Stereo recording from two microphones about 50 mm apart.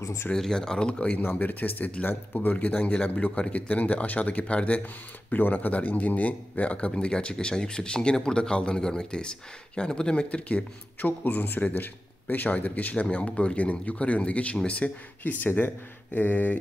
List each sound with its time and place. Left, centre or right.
0.3 s speech: centre
1.2 s speech: left
5.3 s speech: left